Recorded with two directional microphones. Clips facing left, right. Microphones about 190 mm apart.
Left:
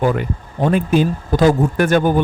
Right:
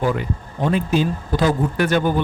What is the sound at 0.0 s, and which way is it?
Speech, 55° left (ahead or behind).